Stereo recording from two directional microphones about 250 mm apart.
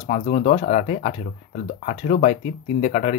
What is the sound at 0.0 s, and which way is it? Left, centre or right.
Speech, left.